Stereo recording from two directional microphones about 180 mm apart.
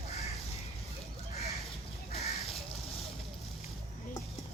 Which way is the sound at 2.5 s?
Centre (ahead or behind).